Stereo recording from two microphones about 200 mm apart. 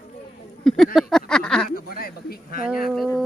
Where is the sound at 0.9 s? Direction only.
5° left (ahead or behind).